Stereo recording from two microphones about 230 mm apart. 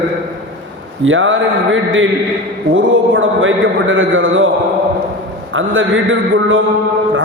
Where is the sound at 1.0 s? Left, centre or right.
Right.